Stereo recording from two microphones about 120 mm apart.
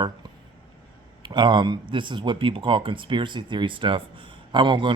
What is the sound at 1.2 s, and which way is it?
A man's voice, 40° right (ahead or behind).